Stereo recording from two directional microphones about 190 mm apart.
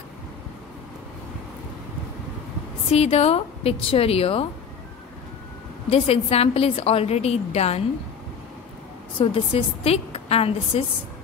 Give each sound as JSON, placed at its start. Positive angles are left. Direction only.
{"t": 2.9, "sound": "a woman's voice", "side_deg": 35}
{"t": 5.9, "sound": "a woman's voice", "side_deg": 30}
{"t": 9.2, "sound": "a woman's voice", "side_deg": 30}